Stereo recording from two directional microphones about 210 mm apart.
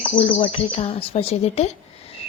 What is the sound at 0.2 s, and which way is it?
Speech, 25° left (ahead or behind).